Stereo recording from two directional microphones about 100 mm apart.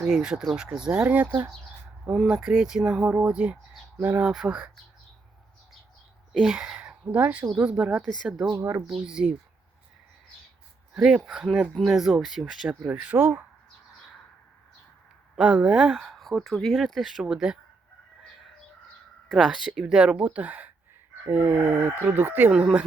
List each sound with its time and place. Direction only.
0.0 s speech: 5° right (ahead or behind)
6.3 s speech: 5° right (ahead or behind)
10.9 s speech: 10° right (ahead or behind)
15.4 s speech: 10° right (ahead or behind)
19.3 s speech: 5° right (ahead or behind)